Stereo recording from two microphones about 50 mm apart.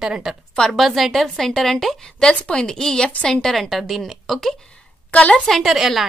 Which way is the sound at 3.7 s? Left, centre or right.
Centre.